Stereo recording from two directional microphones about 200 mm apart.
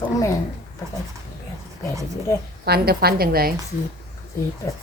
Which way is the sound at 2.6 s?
50° right (ahead or behind).